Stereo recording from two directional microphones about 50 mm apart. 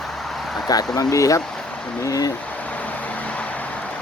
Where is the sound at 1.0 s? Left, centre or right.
Left.